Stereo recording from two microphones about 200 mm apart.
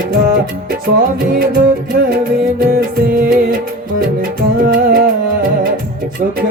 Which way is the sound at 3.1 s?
45° right (ahead or behind).